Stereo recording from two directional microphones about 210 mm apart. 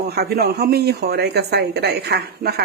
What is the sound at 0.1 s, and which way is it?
Speech, 50° right (ahead or behind).